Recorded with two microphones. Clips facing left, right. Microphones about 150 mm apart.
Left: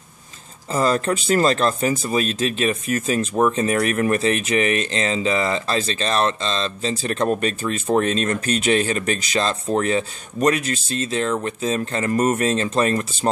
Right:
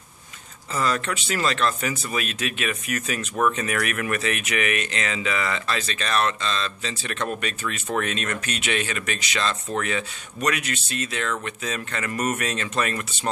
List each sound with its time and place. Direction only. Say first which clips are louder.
0.7 s speech: left 6 dB; 35° left (ahead or behind)